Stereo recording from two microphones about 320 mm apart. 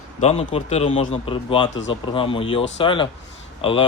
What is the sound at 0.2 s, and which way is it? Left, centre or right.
Speech, centre.